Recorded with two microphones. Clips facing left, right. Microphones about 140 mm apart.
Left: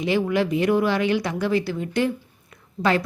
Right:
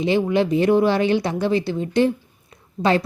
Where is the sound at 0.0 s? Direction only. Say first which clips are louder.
Right 3 dB; 25° right (ahead or behind).